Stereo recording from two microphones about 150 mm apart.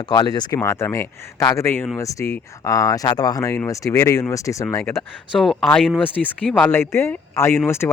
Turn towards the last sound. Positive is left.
turn(degrees=15)  # may be behind; listen again after turning